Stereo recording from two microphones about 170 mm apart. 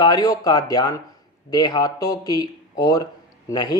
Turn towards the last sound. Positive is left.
turn(degrees=20)  # may be behind; listen again after turning